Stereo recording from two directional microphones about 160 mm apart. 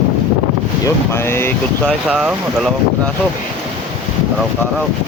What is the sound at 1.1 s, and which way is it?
Speech, 15° left (ahead or behind).